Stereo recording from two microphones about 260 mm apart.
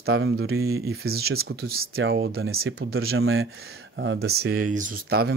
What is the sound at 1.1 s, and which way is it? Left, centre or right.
Speech, right.